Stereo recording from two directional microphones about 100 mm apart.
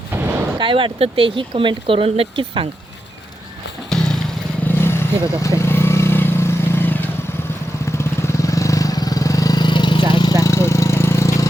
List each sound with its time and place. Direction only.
0.6 s speech: 60° right (ahead or behind)
3.9 s vehicle: 5° left (ahead or behind)
4.6 s vehicle: 20° left (ahead or behind); by 10.3 s 50° left (ahead or behind)
10.4 s a sound: 30° left (ahead or behind)